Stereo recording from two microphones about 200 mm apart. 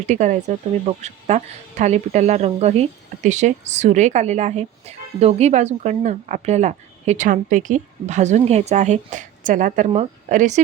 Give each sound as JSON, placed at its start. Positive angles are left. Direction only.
{"t": 0.1, "sound": "a woman's voice", "side_deg": -35}